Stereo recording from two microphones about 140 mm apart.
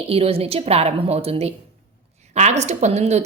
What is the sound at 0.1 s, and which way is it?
A woman's voice, 45° right (ahead or behind).